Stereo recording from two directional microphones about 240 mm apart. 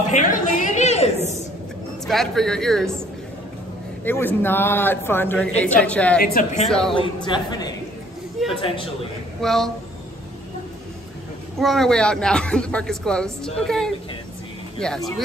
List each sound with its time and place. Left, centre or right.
0.1 s chatter: left
2.0 s speech: centre
4.0 s a man's voice: centre
6.2 s speech: left
6.9 s speech: left
9.4 s speech: centre
11.6 s speech: centre